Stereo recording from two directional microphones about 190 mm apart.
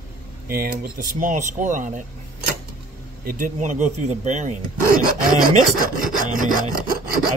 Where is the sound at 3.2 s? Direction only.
50° right (ahead or behind).